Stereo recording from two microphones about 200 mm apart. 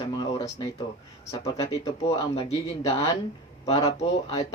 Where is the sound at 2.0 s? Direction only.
30° left (ahead or behind).